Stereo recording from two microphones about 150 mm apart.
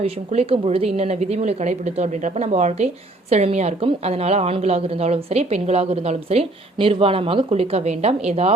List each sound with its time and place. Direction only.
0.0 s a woman's voice: 40° right (ahead or behind)